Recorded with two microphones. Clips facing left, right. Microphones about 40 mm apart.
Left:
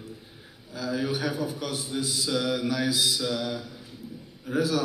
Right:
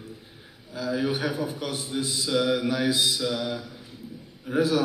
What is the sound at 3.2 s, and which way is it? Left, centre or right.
Speech, centre.